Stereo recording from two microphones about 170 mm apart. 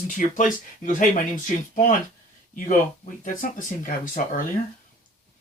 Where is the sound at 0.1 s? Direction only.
50° left (ahead or behind).